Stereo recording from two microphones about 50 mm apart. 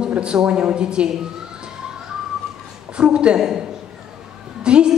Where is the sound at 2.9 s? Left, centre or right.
Right.